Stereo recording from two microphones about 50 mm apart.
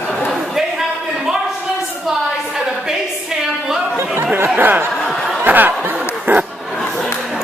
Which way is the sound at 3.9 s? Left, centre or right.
Right.